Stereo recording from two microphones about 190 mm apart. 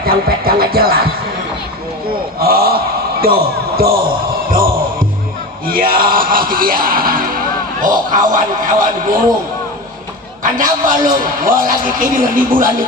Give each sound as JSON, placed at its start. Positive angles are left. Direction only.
{"t": 0.0, "sound": "music", "side_deg": -50}
{"t": 2.4, "sound": "a sound", "side_deg": -55}
{"t": 4.5, "sound": "music", "side_deg": -50}
{"t": 7.8, "sound": "a man's voice", "side_deg": -45}
{"t": 10.4, "sound": "a man's voice", "side_deg": -45}